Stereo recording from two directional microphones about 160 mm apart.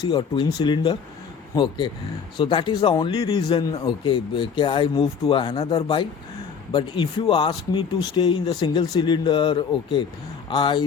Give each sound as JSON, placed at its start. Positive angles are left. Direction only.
{"t": 0.0, "sound": "speech", "side_deg": 30}